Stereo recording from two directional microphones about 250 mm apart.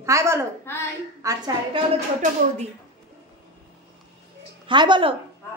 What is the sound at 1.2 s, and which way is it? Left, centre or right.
Speech, centre.